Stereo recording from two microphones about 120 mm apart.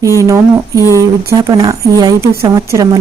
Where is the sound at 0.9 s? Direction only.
25° right (ahead or behind).